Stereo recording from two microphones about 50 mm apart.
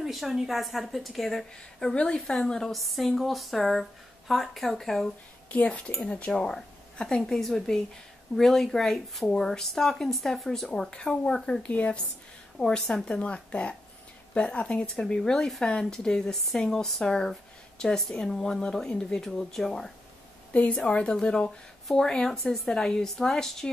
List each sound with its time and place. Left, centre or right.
0.0 s a woman's voice: centre
2.7 s a woman's voice: centre
5.5 s speech: left
6.4 s a woman's voice: centre
11.6 s speech: left
12.5 s speech: centre
13.2 s speech: left; by 19.9 s centre
20.5 s speech: left